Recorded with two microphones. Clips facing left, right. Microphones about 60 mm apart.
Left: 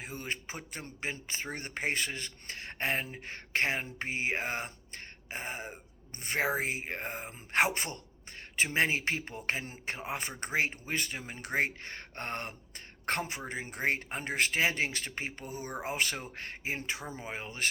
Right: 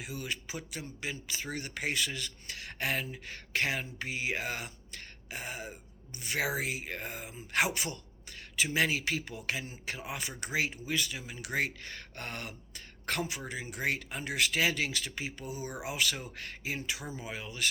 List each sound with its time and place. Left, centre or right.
0.0 s speech: left